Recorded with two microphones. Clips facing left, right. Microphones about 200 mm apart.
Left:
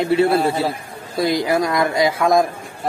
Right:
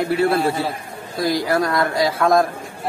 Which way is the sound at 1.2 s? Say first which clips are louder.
Left 1 dB; 15° left (ahead or behind).